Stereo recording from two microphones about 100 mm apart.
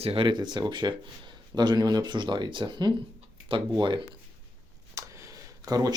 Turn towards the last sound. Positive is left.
turn(degrees=-35)  # may be behind; listen again after turning